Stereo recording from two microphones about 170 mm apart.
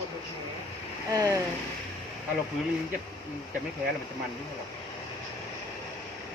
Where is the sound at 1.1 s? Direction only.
20° right (ahead or behind).